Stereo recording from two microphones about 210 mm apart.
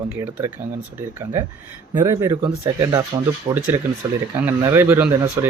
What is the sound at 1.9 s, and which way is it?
Speech, 15° right (ahead or behind).